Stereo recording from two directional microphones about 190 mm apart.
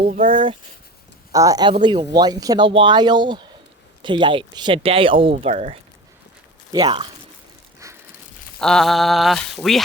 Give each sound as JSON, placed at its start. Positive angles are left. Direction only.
{"t": 1.3, "sound": "speech", "side_deg": -20}
{"t": 6.7, "sound": "speech", "side_deg": -25}
{"t": 8.5, "sound": "speech", "side_deg": 5}